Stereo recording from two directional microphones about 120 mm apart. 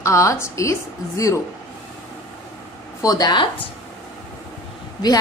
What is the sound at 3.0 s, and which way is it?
Speech, 35° left (ahead or behind).